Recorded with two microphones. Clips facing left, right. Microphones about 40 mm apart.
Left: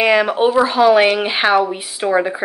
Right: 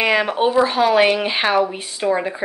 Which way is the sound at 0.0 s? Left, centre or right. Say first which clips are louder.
Left 3 dB; centre.